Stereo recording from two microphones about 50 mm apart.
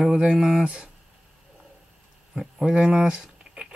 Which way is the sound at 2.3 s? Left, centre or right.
Centre.